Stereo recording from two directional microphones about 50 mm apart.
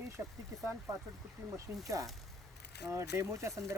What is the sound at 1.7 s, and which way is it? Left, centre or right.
Speech, right.